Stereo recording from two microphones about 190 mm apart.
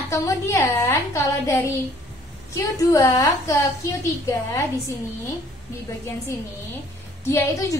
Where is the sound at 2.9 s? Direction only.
15° left (ahead or behind).